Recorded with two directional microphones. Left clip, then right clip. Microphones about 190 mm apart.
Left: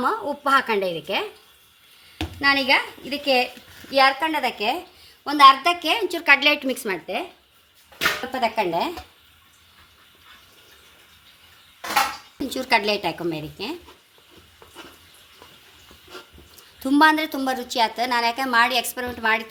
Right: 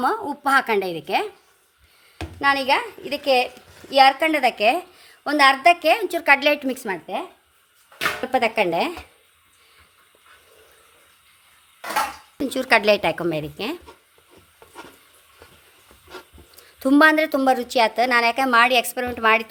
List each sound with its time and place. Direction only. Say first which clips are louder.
0.0 s a woman's voice: right 1 dB; 50° right (ahead or behind)
2.4 s a woman's voice: even; 50° right (ahead or behind); by 7.3 s 25° right (ahead or behind)
8.3 s speech: right 3 dB; 60° right (ahead or behind)
12.5 s a woman's voice: right 4 dB; 50° right (ahead or behind)
16.6 s a woman's voice: right 2 dB; 50° right (ahead or behind)